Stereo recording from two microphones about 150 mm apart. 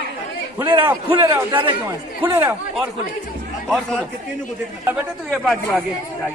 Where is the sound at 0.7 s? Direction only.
25° right (ahead or behind).